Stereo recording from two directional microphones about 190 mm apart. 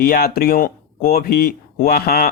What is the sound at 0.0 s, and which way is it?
Speech, 55° left (ahead or behind).